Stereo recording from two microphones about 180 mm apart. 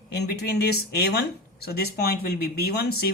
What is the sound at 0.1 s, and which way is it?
Speech, 65° left (ahead or behind).